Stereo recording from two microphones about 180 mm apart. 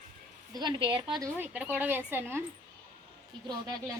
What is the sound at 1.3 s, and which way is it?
A woman's voice, 10° right (ahead or behind).